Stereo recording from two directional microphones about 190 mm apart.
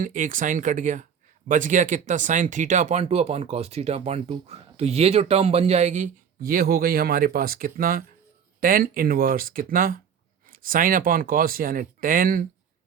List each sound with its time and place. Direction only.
0.0 s speech: 45° right (ahead or behind)